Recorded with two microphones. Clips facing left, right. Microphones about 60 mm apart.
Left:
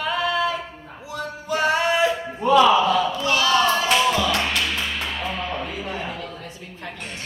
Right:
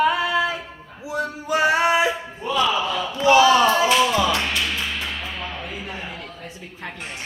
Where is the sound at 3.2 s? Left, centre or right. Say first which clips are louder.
Right 5 dB; centre.